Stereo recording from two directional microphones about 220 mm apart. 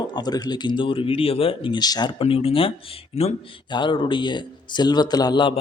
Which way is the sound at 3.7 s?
20° left (ahead or behind).